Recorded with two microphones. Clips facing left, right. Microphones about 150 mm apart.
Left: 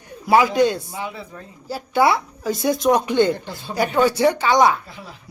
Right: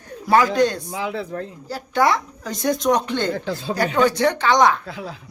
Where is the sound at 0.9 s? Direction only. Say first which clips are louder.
Right 5 dB; 90° right.